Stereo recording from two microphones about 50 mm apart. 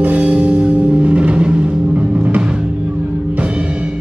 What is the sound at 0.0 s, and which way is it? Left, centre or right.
Music, right.